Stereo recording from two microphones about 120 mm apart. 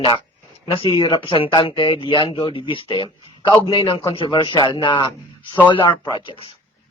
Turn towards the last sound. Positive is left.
turn(degrees=40)  # may be behind; listen again after turning